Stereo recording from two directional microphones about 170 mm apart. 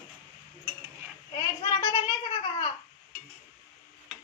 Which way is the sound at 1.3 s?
20° left (ahead or behind).